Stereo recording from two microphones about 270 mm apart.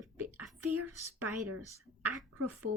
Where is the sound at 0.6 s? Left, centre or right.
Right.